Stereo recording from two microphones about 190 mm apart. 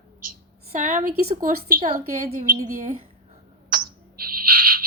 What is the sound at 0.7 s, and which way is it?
Speech, 40° right (ahead or behind).